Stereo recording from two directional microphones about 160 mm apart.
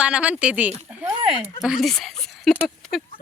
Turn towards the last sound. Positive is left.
turn(degrees=5)  # may be behind; listen again after turning